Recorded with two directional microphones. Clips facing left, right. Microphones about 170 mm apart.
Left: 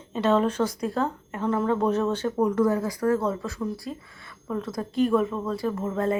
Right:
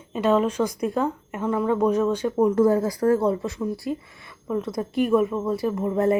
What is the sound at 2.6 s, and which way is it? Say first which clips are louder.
Speech: right 4 dB; 30° right (ahead or behind).